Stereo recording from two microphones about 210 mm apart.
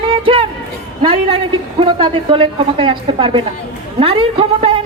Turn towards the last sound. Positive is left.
turn(degrees=-25)  # may be behind; listen again after turning